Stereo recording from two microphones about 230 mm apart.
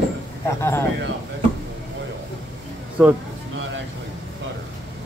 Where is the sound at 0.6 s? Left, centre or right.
Centre.